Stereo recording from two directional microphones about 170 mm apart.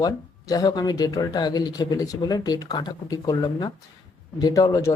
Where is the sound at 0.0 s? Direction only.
20° left (ahead or behind).